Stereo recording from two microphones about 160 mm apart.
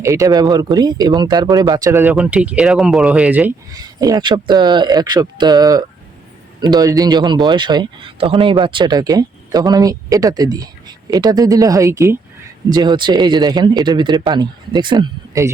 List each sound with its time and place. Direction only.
0.0 s speech: 20° right (ahead or behind)
3.7 s speech: 20° right (ahead or behind)